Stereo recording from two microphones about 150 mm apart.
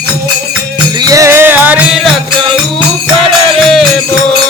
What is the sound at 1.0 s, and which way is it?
Music, 25° right (ahead or behind).